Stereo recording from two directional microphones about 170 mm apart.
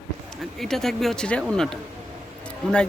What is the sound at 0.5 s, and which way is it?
Speech, centre (ahead or behind).